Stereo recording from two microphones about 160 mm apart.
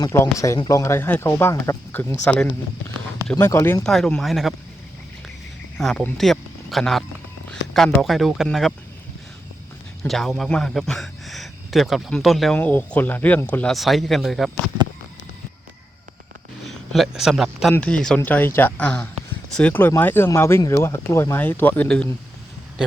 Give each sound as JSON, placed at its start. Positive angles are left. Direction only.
{"t": 0.0, "sound": "speech", "side_deg": 20}
{"t": 3.8, "sound": "a man's voice", "side_deg": 5}
{"t": 5.7, "sound": "a man's voice", "side_deg": 0}
{"t": 10.0, "sound": "a man's voice", "side_deg": 0}
{"t": 16.6, "sound": "a man's voice", "side_deg": 0}